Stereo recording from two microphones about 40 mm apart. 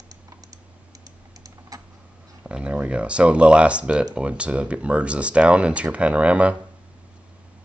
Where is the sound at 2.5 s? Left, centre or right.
Right.